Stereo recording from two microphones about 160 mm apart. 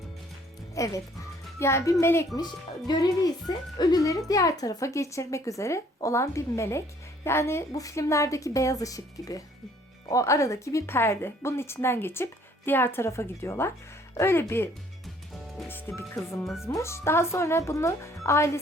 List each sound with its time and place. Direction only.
0.8 s speech: 20° left (ahead or behind)
15.7 s speech: 15° left (ahead or behind)
16.4 s speech: centre (ahead or behind)
16.6 s speech: 15° left (ahead or behind)